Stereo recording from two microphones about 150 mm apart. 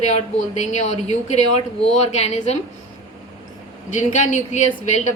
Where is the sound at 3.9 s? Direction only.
55° left (ahead or behind).